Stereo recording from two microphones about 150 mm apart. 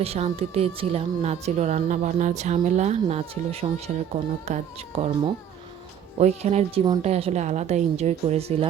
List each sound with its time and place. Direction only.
0.0 s speech: 45° right (ahead or behind)
6.1 s speech: 50° right (ahead or behind)